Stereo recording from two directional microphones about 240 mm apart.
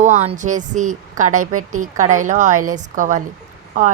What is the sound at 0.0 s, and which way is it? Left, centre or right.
A woman's voice, right.